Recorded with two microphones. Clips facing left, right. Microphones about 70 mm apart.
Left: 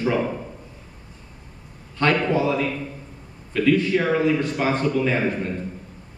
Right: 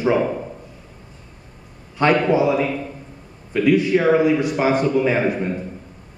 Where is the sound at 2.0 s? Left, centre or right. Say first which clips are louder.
Right 4 dB; centre.